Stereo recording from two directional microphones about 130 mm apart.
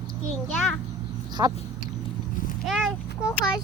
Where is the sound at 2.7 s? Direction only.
Centre (ahead or behind).